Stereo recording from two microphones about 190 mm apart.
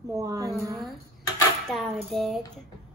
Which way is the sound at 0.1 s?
15° right (ahead or behind).